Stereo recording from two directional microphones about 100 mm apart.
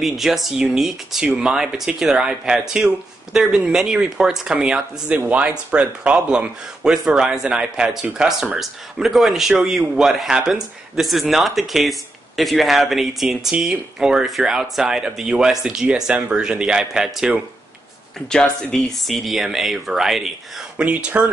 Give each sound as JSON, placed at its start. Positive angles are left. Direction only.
{"t": 0.0, "sound": "speech", "side_deg": 0}
{"t": 18.3, "sound": "speech", "side_deg": 5}